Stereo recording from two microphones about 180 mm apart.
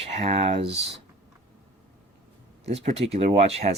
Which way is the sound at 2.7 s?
35° right (ahead or behind).